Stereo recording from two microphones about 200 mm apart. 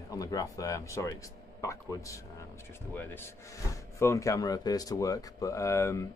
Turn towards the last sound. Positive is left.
turn(degrees=15)  # may be behind; listen again after turning